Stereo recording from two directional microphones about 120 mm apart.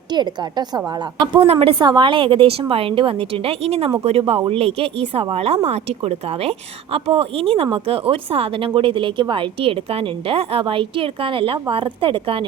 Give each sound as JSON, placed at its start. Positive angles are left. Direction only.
{"t": 0.1, "sound": "a woman's voice", "side_deg": -35}
{"t": 1.4, "sound": "a woman's voice", "side_deg": -50}